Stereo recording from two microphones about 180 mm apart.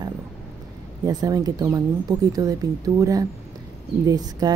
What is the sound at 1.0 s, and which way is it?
Speech, 20° right (ahead or behind).